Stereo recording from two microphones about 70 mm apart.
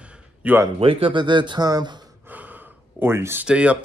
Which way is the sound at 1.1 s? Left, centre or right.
Right.